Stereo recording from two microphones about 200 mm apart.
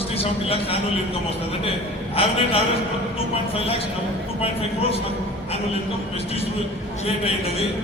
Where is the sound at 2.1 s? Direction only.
30° left (ahead or behind).